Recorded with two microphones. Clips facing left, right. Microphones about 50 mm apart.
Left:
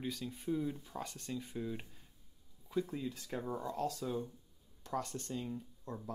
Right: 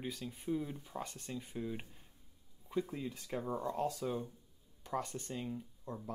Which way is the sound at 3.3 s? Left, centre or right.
Centre.